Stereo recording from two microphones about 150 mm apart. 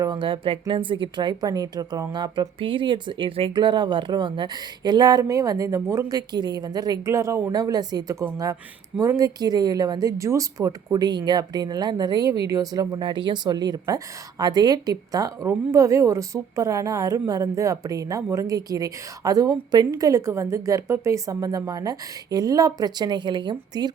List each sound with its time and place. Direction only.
0.0 s a woman's voice: 30° right (ahead or behind)